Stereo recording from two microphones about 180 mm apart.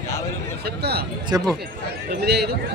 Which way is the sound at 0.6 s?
60° right (ahead or behind).